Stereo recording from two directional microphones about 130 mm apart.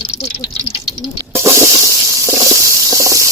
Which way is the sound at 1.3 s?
20° right (ahead or behind).